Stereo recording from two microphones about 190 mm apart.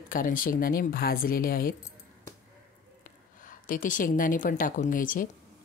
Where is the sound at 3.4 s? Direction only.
45° left (ahead or behind).